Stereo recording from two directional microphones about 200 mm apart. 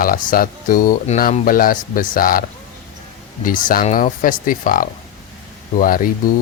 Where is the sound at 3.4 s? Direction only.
45° left (ahead or behind).